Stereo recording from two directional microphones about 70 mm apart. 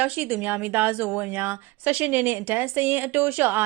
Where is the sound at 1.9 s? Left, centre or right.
Right.